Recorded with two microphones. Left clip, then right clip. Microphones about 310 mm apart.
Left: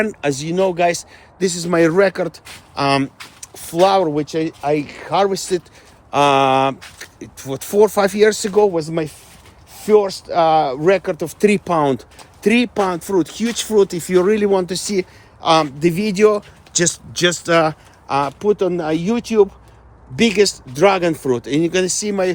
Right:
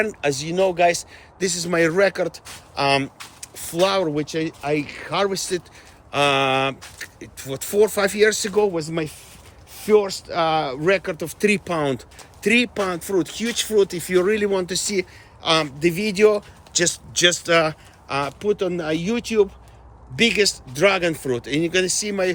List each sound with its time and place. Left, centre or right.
0.0 s speech: centre
3.5 s speech: centre